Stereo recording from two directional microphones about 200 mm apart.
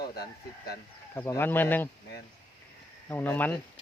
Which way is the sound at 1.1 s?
10° left (ahead or behind).